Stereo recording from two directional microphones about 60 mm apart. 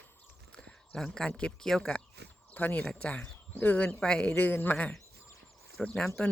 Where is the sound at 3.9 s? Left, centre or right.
Centre.